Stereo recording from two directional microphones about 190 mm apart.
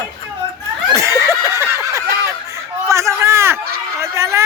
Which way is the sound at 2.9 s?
15° right (ahead or behind).